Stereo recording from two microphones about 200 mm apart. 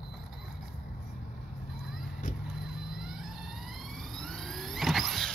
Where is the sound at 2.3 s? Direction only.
40° left (ahead or behind).